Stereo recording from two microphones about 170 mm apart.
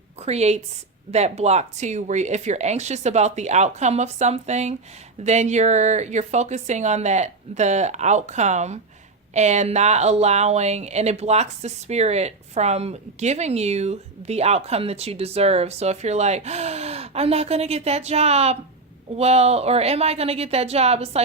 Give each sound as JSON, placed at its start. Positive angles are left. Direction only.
{"t": 0.3, "sound": "a woman's voice", "side_deg": -40}